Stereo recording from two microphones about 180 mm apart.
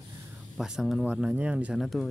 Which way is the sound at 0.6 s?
Centre (ahead or behind).